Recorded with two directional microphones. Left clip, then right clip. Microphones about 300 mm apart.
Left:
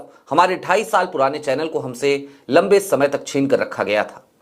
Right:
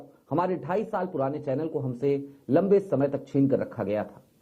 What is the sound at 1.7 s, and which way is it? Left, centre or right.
Speech, left.